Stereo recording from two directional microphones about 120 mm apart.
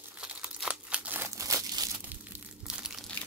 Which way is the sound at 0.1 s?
10° right (ahead or behind).